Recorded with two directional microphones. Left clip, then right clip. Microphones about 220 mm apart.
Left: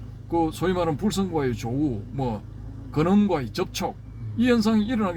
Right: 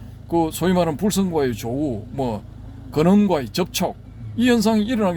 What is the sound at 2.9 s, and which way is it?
Speech, 50° right (ahead or behind).